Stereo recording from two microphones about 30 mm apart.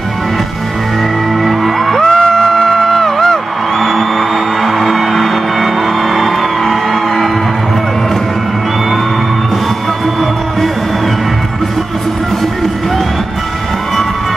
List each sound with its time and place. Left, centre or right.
1.4 s music: centre
2.0 s music: left
4.6 s music: centre